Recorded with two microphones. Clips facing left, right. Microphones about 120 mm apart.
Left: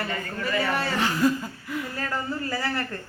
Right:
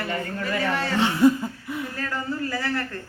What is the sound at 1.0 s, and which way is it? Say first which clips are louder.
Laughter: right 7 dB; 20° right (ahead or behind).